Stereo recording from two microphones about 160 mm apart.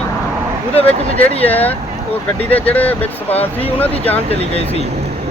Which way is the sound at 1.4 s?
10° left (ahead or behind).